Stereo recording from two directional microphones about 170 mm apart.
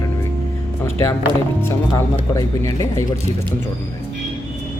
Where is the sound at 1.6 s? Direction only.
15° left (ahead or behind).